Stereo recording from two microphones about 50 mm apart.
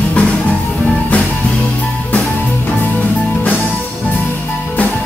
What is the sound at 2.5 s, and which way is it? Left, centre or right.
Music, left.